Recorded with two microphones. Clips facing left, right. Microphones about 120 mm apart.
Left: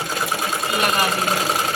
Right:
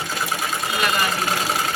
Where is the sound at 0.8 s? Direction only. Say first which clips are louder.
Left 2 dB; 35° left (ahead or behind).